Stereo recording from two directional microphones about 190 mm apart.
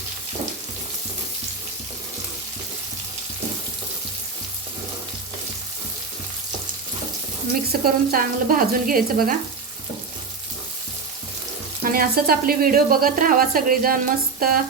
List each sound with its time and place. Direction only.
7.9 s speech: 50° right (ahead or behind)
11.8 s speech: 50° right (ahead or behind)